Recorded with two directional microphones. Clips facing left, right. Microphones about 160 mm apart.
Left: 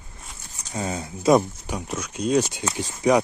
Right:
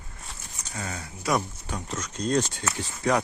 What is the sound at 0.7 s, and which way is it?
Speech, 20° left (ahead or behind).